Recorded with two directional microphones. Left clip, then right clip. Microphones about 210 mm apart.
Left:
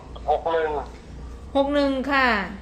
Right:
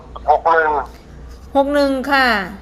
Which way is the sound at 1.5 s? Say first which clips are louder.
Right 6 dB; 30° right (ahead or behind).